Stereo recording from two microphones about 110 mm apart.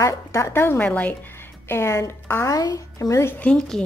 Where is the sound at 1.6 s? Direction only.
25° left (ahead or behind).